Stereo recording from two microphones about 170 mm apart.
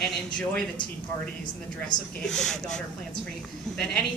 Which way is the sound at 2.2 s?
Centre (ahead or behind).